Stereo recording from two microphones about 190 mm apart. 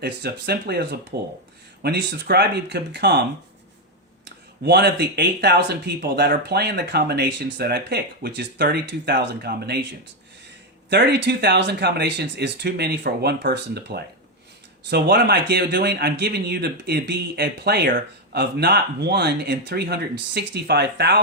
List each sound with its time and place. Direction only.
0.0 s speech: 55° right (ahead or behind)
4.6 s speech: 60° right (ahead or behind)
10.8 s speech: 60° right (ahead or behind)